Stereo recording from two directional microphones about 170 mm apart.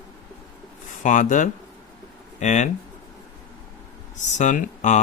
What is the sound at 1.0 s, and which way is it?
Speech, 50° left (ahead or behind).